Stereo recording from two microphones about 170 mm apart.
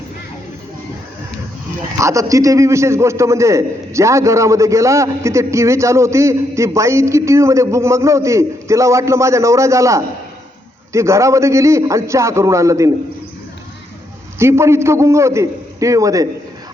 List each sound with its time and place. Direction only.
2.0 s a man's voice: 20° right (ahead or behind)
14.3 s a man's voice: 15° right (ahead or behind)